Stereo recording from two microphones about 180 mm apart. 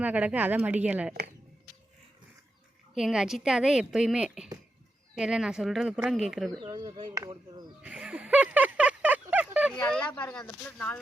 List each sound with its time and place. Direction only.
0.0 s a woman's voice: 10° right (ahead or behind)
2.9 s speech: 5° right (ahead or behind)
6.5 s speech: 25° right (ahead or behind)
7.8 s a sound: 5° right (ahead or behind)
9.7 s speech: 5° left (ahead or behind)